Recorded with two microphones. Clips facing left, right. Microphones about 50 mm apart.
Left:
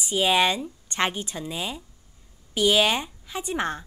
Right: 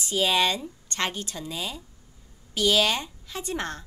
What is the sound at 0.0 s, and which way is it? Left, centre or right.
A woman's voice, centre.